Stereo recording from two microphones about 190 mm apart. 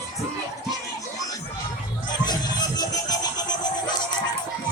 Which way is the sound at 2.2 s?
20° left (ahead or behind).